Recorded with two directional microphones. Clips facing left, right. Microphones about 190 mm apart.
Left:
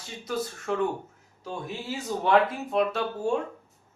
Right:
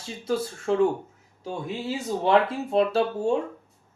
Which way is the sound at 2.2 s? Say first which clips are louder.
Right 1 dB; 30° right (ahead or behind).